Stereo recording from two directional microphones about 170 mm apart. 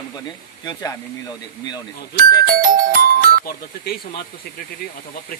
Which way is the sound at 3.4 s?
60° left (ahead or behind).